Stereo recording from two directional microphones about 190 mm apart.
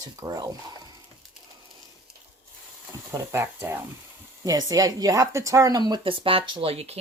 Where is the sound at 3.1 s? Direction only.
15° right (ahead or behind).